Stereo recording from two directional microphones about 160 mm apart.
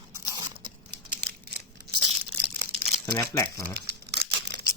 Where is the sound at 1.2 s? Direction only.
80° right.